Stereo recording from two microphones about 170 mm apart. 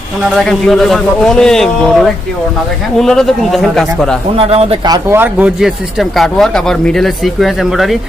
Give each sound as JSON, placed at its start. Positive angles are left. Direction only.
{"t": 0.4, "sound": "a man's voice", "side_deg": 0}
{"t": 4.4, "sound": "speech", "side_deg": -35}
{"t": 5.1, "sound": "a man's voice", "side_deg": -10}